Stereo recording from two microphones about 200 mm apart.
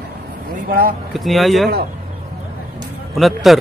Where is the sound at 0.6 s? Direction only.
45° right (ahead or behind).